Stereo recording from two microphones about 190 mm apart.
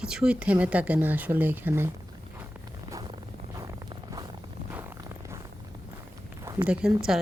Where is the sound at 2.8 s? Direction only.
20° right (ahead or behind).